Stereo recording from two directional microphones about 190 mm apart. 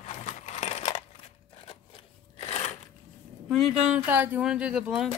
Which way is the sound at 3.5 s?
5° right (ahead or behind).